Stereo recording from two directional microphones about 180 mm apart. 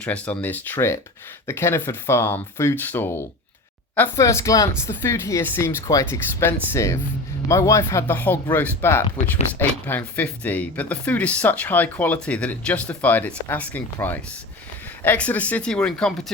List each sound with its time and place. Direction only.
0.0 s speech: 5° left (ahead or behind)